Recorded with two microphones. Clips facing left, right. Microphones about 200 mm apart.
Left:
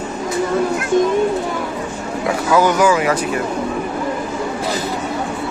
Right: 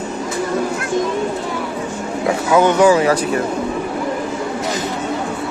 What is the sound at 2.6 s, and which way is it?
Speech, 25° right (ahead or behind).